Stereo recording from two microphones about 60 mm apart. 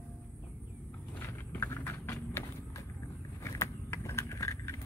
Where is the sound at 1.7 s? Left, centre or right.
Left.